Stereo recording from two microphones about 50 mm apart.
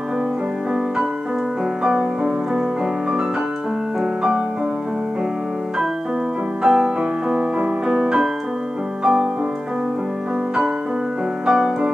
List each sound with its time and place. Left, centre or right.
1.8 s music: centre
4.0 s piano: centre
6.6 s music: centre
11.4 s piano: centre